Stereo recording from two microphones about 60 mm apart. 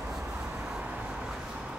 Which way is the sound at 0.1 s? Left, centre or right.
Centre.